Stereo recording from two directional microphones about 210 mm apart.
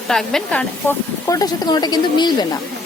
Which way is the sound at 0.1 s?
Centre (ahead or behind).